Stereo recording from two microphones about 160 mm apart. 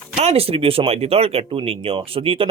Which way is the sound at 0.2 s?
40° right (ahead or behind).